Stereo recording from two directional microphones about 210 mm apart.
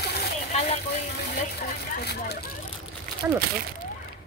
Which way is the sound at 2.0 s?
50° left (ahead or behind).